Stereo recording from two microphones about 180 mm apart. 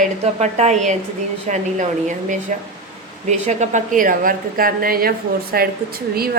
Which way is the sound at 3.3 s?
40° right (ahead or behind).